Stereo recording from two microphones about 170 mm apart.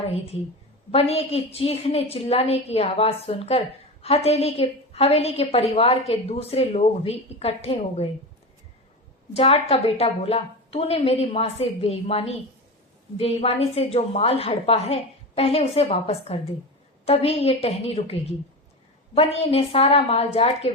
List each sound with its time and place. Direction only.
0.9 s a woman's voice: 35° left (ahead or behind)
9.3 s a woman's voice: 35° left (ahead or behind)